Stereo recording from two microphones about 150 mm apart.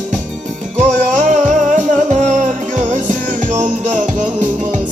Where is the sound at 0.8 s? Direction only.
55° right (ahead or behind).